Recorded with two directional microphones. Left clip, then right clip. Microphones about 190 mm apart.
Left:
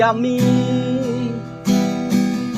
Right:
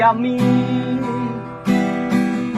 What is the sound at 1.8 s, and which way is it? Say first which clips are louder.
Music: right 1 dB; 40° left (ahead or behind).